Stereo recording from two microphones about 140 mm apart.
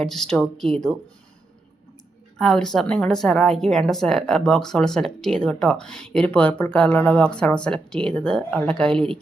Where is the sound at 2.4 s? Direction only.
5° left (ahead or behind).